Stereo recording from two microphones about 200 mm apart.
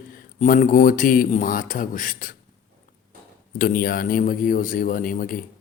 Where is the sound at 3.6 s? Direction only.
45° left (ahead or behind).